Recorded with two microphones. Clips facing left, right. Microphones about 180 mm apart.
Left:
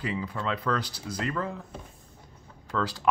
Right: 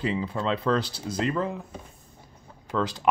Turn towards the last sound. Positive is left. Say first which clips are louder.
# right 2 dB
turn(degrees=-20)  # may be behind; listen again after turning